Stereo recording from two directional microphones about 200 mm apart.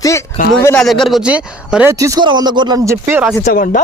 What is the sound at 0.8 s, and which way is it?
Speech, centre (ahead or behind).